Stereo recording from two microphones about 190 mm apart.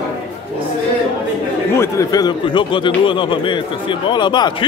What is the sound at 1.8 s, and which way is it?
A man's voice, 20° left (ahead or behind).